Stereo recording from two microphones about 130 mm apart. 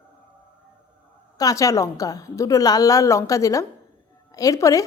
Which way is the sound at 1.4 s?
25° left (ahead or behind).